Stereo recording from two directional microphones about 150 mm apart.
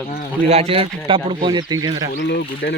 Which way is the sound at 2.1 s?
85° left.